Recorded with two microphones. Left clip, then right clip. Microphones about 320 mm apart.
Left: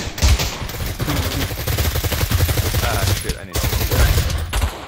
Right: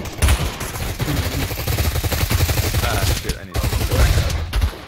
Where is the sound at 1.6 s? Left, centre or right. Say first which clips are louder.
Left 1 dB; centre.